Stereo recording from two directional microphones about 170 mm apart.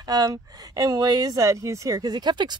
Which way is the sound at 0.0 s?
20° right (ahead or behind).